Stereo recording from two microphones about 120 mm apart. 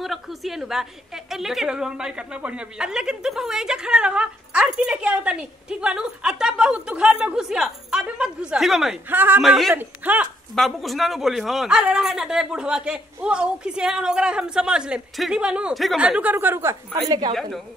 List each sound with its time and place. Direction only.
0.0 s a woman's voice: centre (ahead or behind)
9.1 s a woman's voice: 15° right (ahead or behind)
9.4 s a man's voice: centre (ahead or behind)
9.8 s a woman's voice: 15° right (ahead or behind)
10.5 s a woman's voice: centre (ahead or behind); by 17.0 s 20° right (ahead or behind)
17.3 s a man's voice: centre (ahead or behind)